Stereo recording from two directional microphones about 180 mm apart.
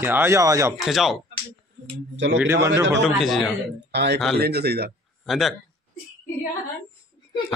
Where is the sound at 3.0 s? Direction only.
Centre (ahead or behind).